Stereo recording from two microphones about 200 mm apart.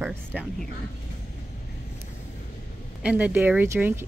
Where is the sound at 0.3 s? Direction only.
5° left (ahead or behind).